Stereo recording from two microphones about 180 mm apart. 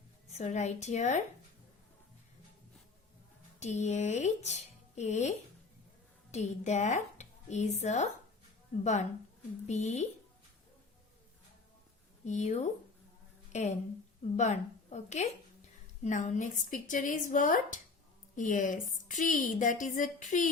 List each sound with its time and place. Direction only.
0.3 s speech: 40° left (ahead or behind)
3.6 s speech: 40° left (ahead or behind)
6.3 s speech: 40° left (ahead or behind)
12.2 s a woman's voice: 40° left (ahead or behind)